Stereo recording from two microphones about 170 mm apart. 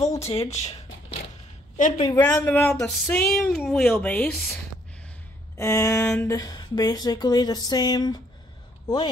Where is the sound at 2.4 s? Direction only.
10° left (ahead or behind).